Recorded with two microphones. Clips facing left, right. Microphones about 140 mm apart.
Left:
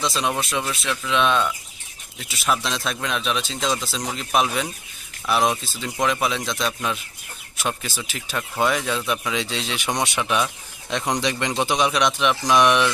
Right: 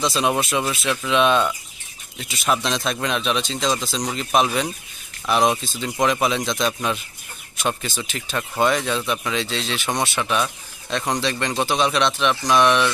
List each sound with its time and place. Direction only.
0.0 s speech: centre (ahead or behind); by 12.9 s 15° left (ahead or behind)